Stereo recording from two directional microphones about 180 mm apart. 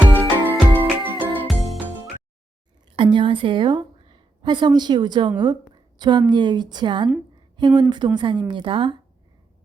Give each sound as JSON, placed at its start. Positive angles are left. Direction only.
{"t": 0.1, "sound": "music", "side_deg": -10}
{"t": 1.4, "sound": "music", "side_deg": 0}
{"t": 2.9, "sound": "a woman's voice", "side_deg": -25}